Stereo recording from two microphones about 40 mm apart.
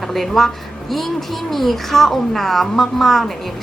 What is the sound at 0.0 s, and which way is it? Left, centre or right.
A woman's voice, centre.